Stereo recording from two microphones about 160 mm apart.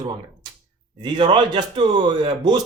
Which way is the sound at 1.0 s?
30° right (ahead or behind).